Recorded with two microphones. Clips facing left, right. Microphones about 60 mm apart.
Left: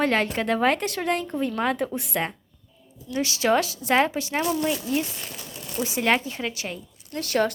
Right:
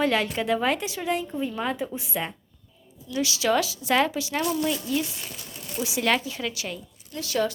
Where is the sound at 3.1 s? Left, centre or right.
Left.